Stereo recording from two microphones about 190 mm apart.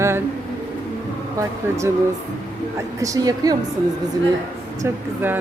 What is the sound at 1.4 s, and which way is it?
Speech, 15° right (ahead or behind).